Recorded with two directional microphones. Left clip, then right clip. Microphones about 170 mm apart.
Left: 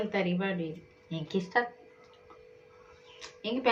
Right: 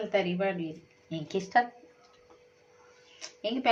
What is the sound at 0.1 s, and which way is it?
Speech, 25° right (ahead or behind).